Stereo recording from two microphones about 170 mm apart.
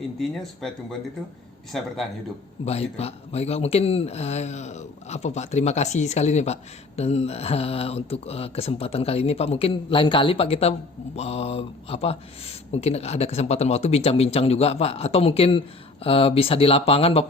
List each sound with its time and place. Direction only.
0.2 s speech: 5° left (ahead or behind)
2.6 s speech: 35° left (ahead or behind)